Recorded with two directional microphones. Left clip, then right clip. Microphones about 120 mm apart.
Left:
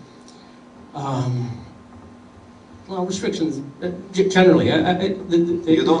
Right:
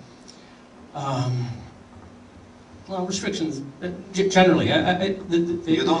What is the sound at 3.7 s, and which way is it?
A man's voice, 5° right (ahead or behind).